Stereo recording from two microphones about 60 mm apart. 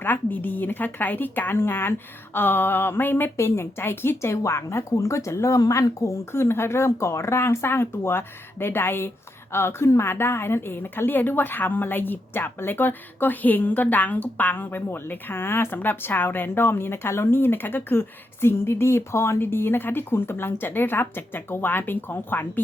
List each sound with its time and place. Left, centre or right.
0.0 s a woman's voice: left
3.3 s a woman's voice: left
19.4 s a woman's voice: left